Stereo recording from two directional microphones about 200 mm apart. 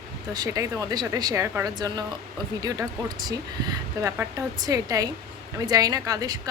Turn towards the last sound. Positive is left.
turn(degrees=-20)  # may be behind; listen again after turning